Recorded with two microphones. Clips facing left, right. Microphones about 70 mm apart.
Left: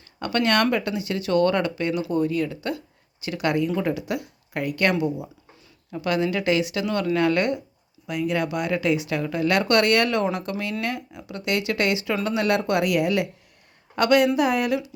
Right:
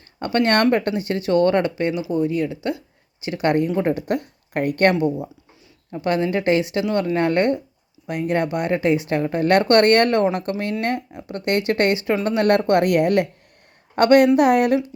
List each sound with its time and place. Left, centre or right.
0.2 s speech: right
3.8 s a woman's voice: right